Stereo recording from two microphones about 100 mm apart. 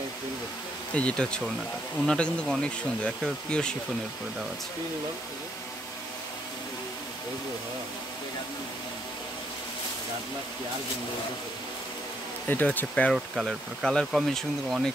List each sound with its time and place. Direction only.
0.9 s speech: 10° left (ahead or behind)
12.4 s speech: 20° left (ahead or behind)
13.1 s speech: centre (ahead or behind)